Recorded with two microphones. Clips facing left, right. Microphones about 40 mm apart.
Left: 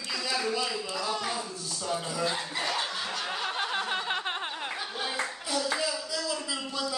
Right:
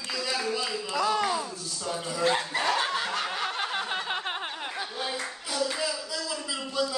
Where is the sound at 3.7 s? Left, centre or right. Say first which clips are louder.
Even; centre.